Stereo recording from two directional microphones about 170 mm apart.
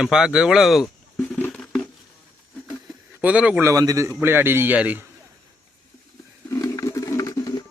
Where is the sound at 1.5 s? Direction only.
5° left (ahead or behind).